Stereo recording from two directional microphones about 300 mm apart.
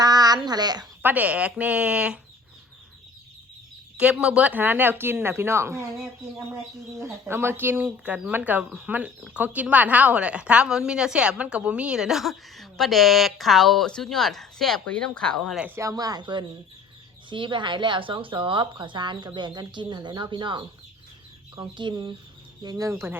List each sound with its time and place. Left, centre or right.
0.0 s a child's voice: centre
3.9 s a woman's voice: centre